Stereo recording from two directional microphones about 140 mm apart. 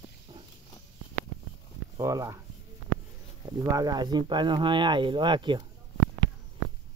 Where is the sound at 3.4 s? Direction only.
25° right (ahead or behind).